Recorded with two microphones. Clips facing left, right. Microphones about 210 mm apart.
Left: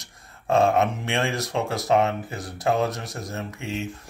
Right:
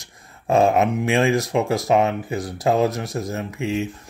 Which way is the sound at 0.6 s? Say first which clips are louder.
Right 3 dB; 20° right (ahead or behind).